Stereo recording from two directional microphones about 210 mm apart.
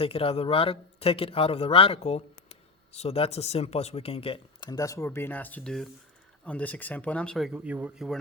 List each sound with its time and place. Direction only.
0.0 s speech: 25° left (ahead or behind); by 8.2 s centre (ahead or behind)